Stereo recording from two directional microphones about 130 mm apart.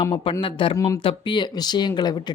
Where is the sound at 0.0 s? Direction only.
40° left (ahead or behind).